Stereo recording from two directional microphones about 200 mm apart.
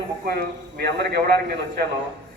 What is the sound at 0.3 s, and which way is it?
A man's voice, 55° right (ahead or behind).